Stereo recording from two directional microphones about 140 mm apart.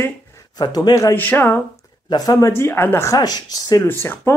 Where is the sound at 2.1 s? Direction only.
30° left (ahead or behind).